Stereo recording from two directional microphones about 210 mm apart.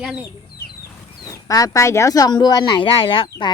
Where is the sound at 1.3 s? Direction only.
15° left (ahead or behind).